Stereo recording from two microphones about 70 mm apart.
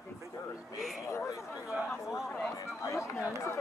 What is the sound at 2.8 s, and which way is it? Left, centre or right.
Speech, left.